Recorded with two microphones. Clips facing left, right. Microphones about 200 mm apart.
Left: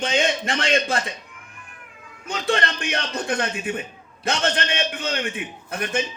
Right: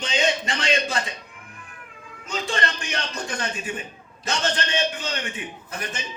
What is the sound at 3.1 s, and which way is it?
Speech, 60° left (ahead or behind).